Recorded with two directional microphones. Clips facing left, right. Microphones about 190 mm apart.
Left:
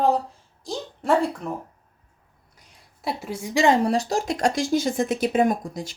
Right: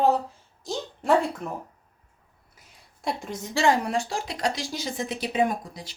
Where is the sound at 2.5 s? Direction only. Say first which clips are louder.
Left 1 dB; centre (ahead or behind); by 3.7 s 15° left (ahead or behind).